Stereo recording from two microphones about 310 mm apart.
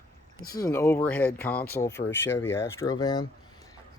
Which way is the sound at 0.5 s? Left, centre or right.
Centre.